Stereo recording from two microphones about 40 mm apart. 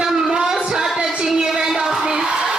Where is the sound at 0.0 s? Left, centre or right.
Centre.